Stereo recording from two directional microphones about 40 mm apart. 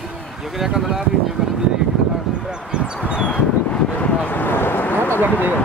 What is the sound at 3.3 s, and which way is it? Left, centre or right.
Wind, left.